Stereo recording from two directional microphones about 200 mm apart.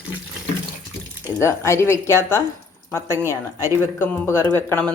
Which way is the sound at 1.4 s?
15° left (ahead or behind).